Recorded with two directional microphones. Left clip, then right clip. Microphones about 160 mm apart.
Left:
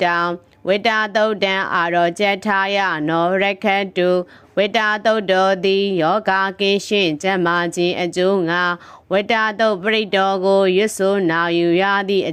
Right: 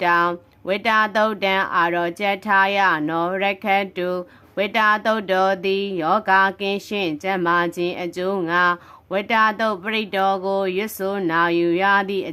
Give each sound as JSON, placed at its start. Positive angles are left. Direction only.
{"t": 0.0, "sound": "speech", "side_deg": 30}